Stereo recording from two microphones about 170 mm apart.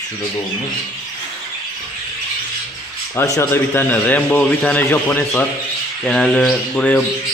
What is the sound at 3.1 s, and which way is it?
Speech, 15° left (ahead or behind).